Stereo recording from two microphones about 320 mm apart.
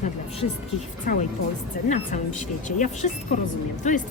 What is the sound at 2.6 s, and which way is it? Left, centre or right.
A woman's voice, left.